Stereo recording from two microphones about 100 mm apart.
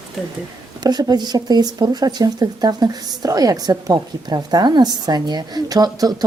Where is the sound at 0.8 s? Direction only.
45° right (ahead or behind).